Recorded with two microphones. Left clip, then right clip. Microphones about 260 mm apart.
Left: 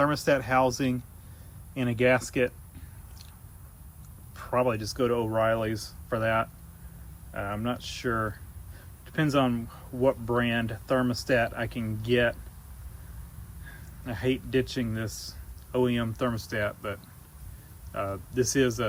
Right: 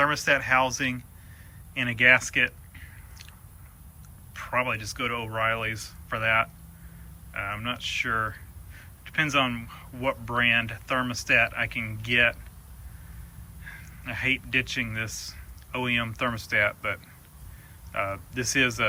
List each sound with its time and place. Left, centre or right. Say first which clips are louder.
0.0 s speech: right 2 dB; centre
4.4 s speech: left 1 dB; centre
13.7 s speech: right 3 dB; centre